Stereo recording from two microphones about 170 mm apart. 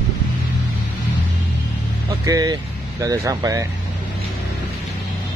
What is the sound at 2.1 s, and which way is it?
Speech, 20° right (ahead or behind).